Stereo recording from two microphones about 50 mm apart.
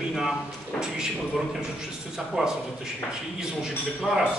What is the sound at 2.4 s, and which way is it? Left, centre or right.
Speech, centre.